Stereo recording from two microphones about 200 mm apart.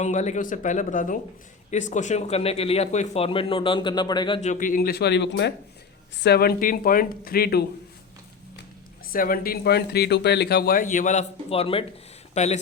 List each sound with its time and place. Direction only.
0.0 s speech: 35° left (ahead or behind)
4.4 s speech: 40° left (ahead or behind)
9.1 s speech: 45° left (ahead or behind)